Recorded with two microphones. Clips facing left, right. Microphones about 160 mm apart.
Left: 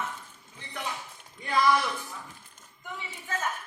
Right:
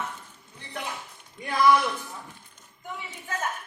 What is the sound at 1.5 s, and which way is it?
Speech, 55° right (ahead or behind).